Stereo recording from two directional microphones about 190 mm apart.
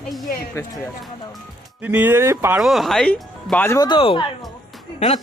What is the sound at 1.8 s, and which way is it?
Speech, 10° right (ahead or behind).